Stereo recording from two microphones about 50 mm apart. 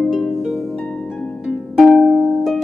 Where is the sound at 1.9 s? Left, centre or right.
Centre.